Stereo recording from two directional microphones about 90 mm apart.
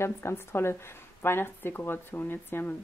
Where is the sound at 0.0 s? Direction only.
30° left (ahead or behind).